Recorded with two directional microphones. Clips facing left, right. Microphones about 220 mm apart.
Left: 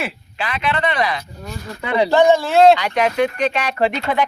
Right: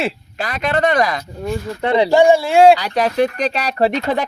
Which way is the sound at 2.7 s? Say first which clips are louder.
Right 1 dB; 35° right (ahead or behind).